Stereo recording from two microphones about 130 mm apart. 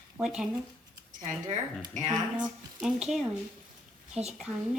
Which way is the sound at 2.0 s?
30° right (ahead or behind).